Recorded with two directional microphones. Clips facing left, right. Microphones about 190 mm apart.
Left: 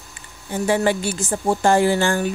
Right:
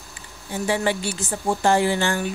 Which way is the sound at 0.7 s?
45° left (ahead or behind).